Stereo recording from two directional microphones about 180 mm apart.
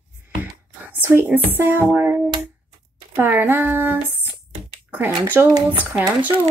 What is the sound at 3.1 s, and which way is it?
A woman's voice, 10° right (ahead or behind).